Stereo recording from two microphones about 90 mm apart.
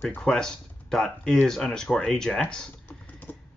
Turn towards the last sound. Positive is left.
turn(degrees=20)  # may be behind; listen again after turning